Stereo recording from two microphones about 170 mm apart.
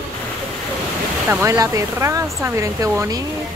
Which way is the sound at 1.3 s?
15° right (ahead or behind).